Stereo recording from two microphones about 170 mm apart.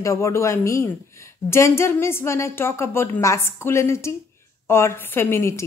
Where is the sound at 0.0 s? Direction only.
15° left (ahead or behind).